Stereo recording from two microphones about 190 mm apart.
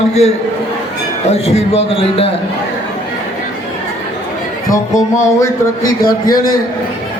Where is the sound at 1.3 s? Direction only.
35° left (ahead or behind).